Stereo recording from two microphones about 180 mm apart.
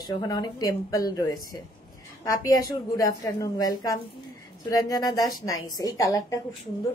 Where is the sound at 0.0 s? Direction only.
20° left (ahead or behind).